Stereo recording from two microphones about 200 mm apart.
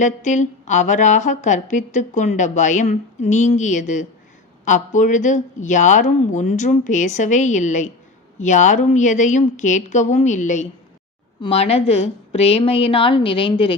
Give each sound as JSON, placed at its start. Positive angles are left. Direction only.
{"t": 0.0, "sound": "a woman's voice", "side_deg": 35}